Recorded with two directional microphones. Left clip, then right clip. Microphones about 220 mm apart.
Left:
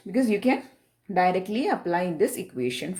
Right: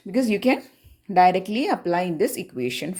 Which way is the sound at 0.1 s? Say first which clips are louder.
Right 2 dB; 35° right (ahead or behind).